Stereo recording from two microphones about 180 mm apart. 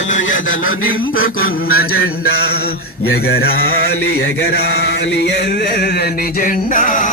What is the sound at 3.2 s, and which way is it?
Mantra, 60° left (ahead or behind).